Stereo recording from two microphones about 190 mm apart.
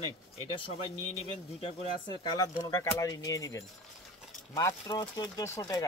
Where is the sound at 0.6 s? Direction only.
30° left (ahead or behind).